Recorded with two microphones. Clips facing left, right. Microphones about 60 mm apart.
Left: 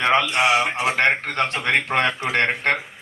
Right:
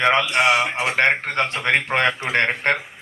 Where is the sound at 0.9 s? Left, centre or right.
Right.